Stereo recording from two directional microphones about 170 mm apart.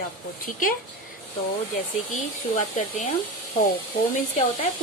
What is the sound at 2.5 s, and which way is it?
Speech, 45° left (ahead or behind).